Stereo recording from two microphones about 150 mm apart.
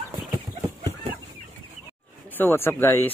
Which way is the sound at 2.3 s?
15° left (ahead or behind).